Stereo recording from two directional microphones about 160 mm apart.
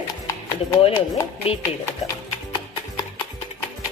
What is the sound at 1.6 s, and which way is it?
Speech, 20° left (ahead or behind).